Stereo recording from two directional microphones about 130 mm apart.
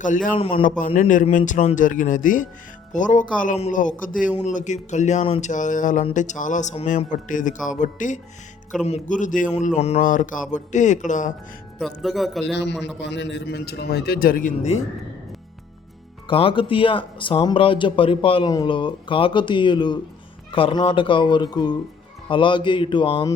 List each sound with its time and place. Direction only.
0.0 s speech: 85° left
2.9 s speech: 75° left (ahead or behind)
4.4 s a man's voice: 65° left (ahead or behind)
5.2 s speech: 50° left (ahead or behind)
5.5 s speech: 75° left (ahead or behind)
8.7 s a man's voice: centre (ahead or behind)
9.0 s speech: 80° left
9.5 s a man's voice: 60° left (ahead or behind)
10.0 s speech: 90° left; by 11.3 s 75° left (ahead or behind)
11.8 s a man's voice: centre (ahead or behind)
14.3 s speech: 90° left
16.2 s speech: 45° left (ahead or behind)
18.4 s speech: 35° left (ahead or behind)